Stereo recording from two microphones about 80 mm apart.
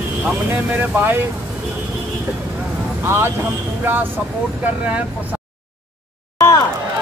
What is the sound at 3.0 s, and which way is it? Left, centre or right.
Speech, right.